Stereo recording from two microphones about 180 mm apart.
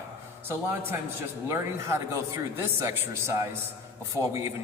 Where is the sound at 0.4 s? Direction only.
15° right (ahead or behind).